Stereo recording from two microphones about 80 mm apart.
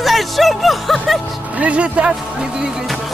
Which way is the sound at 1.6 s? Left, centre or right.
Centre.